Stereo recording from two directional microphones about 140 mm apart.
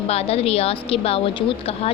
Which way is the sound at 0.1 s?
45° left (ahead or behind).